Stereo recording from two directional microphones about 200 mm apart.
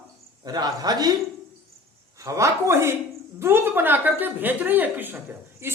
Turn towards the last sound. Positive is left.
turn(degrees=-10)  # may be behind; listen again after turning